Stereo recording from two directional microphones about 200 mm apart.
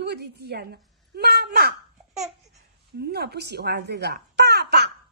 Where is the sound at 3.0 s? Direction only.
55° right (ahead or behind).